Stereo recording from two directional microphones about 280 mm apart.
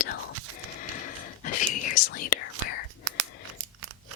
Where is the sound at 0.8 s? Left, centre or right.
Left.